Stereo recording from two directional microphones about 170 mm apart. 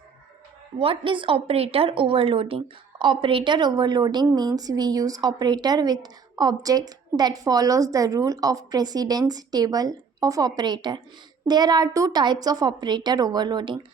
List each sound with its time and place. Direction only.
0.8 s a woman's voice: 30° right (ahead or behind)